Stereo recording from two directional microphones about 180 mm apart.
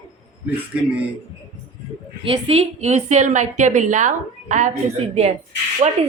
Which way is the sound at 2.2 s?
35° right (ahead or behind).